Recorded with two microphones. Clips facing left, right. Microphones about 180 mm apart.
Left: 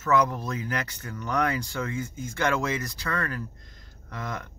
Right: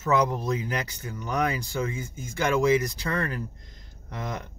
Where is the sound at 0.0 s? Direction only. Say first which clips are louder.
Even; 15° right (ahead or behind).